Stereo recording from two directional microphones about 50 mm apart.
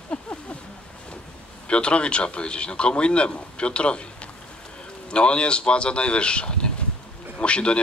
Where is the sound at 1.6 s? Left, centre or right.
Left.